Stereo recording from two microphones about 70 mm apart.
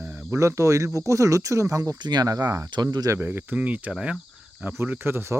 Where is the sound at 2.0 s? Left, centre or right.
Right.